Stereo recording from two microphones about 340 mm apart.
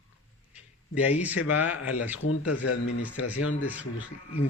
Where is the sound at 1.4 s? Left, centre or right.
Left.